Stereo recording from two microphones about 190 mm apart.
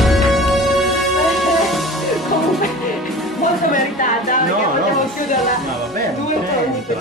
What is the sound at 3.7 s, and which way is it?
Speech, 45° left (ahead or behind).